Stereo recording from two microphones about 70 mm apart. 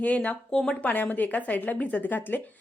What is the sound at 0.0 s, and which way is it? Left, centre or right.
Speech, centre.